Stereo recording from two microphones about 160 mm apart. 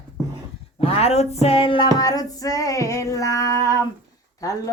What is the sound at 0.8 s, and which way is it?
Speech, 40° left (ahead or behind).